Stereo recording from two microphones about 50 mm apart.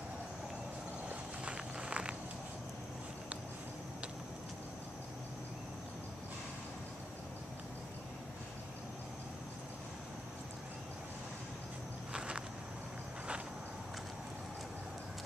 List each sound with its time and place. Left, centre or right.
1.0 s walk: right
12.1 s walk: right